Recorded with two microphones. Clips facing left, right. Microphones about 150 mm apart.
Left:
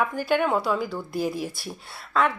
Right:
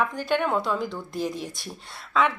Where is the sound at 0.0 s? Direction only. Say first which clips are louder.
Left 2 dB; 5° left (ahead or behind).